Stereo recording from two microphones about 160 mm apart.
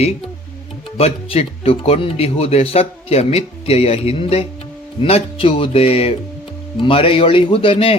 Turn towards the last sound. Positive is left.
turn(degrees=35)  # may be behind; listen again after turning